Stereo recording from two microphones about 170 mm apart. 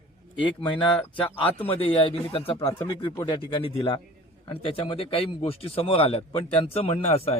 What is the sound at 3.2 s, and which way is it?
Speech, 30° left (ahead or behind).